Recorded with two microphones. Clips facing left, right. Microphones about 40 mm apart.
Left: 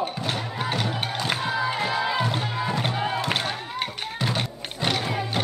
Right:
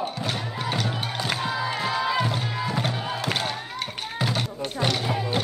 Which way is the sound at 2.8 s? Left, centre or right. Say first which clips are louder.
Left 2 dB; centre.